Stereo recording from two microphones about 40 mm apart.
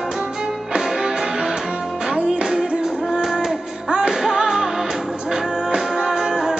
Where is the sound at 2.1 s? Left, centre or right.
Right.